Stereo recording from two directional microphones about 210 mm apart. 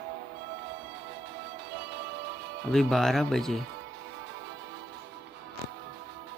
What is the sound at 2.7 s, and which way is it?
Speech, centre (ahead or behind).